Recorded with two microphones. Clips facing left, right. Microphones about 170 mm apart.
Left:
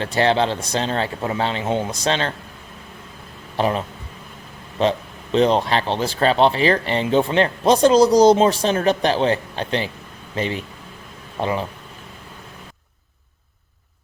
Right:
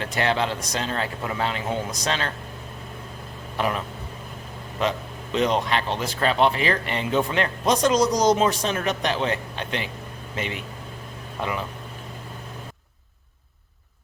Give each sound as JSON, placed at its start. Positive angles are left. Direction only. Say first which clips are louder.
{"t": 0.0, "sound": "speech", "louder": "left 6 dB", "side_deg": 30}
{"t": 3.6, "sound": "speech", "louder": "left 5 dB", "side_deg": 30}